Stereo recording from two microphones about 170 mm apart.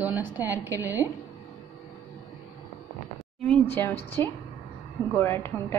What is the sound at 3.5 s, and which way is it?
A woman's voice, 10° left (ahead or behind).